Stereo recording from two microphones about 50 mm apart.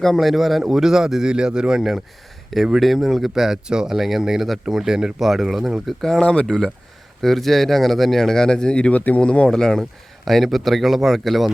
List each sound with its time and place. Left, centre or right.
0.0 s speech: centre
2.7 s speech: centre; by 9.0 s left
9.0 s speech: left
9.2 s speech: left
9.5 s speech: centre
10.2 s speech: centre